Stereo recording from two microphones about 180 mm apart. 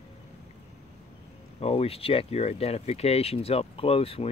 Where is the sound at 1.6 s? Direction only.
35° left (ahead or behind).